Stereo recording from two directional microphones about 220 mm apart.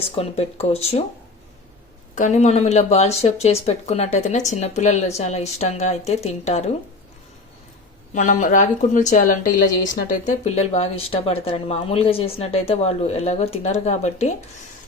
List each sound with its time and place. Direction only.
0.2 s speech: 25° left (ahead or behind)
2.1 s speech: 35° left (ahead or behind)
8.1 s speech: 35° left (ahead or behind)